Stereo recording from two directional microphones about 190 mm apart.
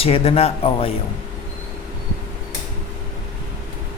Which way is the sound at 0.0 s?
30° left (ahead or behind).